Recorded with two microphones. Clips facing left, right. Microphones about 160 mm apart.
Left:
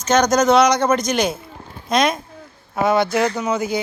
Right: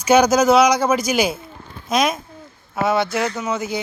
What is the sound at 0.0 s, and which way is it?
Child singing, 10° right (ahead or behind).